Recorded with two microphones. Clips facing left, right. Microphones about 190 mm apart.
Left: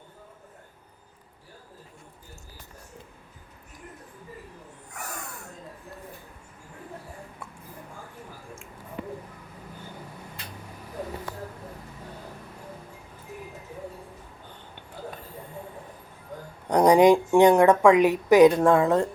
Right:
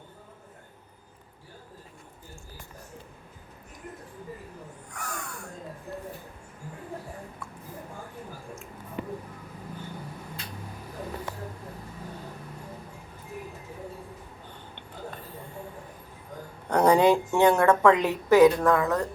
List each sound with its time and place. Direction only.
4.9 s snort: 20° left (ahead or behind)
16.6 s a woman's voice: 15° left (ahead or behind)
18.6 s a woman's voice: 25° left (ahead or behind)